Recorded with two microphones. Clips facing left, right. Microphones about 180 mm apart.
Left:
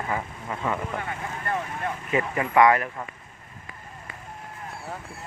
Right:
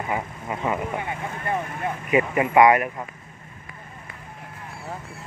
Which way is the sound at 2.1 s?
15° right (ahead or behind).